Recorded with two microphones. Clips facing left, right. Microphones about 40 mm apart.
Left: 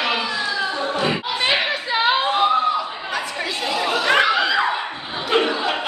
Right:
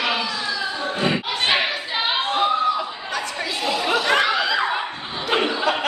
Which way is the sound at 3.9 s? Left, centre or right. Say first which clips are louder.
Left 2 dB; centre.